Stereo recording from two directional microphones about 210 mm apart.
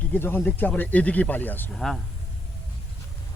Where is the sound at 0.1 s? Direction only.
10° left (ahead or behind).